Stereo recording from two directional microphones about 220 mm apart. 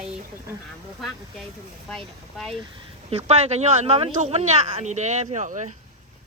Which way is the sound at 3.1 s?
30° right (ahead or behind).